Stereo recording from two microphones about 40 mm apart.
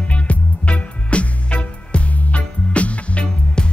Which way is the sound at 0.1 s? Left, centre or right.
Left.